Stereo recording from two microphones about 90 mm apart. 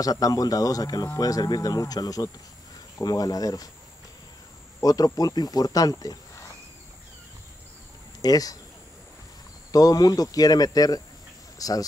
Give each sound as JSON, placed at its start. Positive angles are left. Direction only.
{"t": 0.0, "sound": "speech", "side_deg": 40}
{"t": 4.8, "sound": "speech", "side_deg": 45}
{"t": 8.2, "sound": "speech", "side_deg": 45}
{"t": 9.7, "sound": "speech", "side_deg": 45}
{"t": 11.5, "sound": "insect", "side_deg": 40}